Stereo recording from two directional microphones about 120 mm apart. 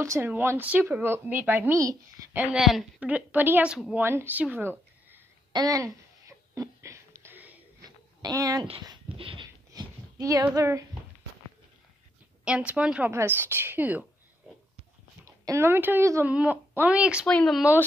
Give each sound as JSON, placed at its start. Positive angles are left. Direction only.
{"t": 0.0, "sound": "speech", "side_deg": -20}
{"t": 2.3, "sound": "speech", "side_deg": -5}
{"t": 5.5, "sound": "a sound", "side_deg": -30}
{"t": 8.2, "sound": "speech", "side_deg": -30}
{"t": 8.8, "sound": "speech", "side_deg": -45}
{"t": 9.7, "sound": "a sound", "side_deg": -30}
{"t": 12.4, "sound": "speech", "side_deg": -10}
{"t": 15.2, "sound": "speech", "side_deg": -25}
{"t": 17.3, "sound": "speech", "side_deg": 5}
{"t": 17.6, "sound": "speech", "side_deg": -15}